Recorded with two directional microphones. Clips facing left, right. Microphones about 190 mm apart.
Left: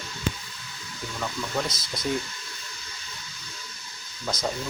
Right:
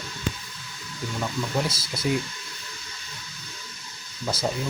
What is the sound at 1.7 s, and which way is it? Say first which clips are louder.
Speech: right 1 dB; 30° right (ahead or behind).